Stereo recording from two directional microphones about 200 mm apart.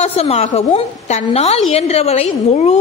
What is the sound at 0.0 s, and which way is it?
A woman's voice, 35° left (ahead or behind).